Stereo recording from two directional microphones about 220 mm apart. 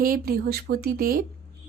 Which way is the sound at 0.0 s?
40° right (ahead or behind).